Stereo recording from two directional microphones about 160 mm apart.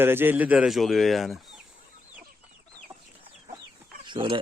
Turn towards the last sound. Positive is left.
turn(degrees=-30)  # may be behind; listen again after turning